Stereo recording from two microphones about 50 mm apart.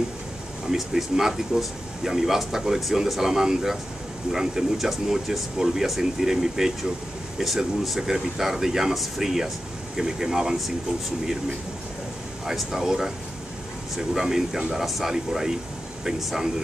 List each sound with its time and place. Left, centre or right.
0.7 s speech: centre
12.4 s speech: centre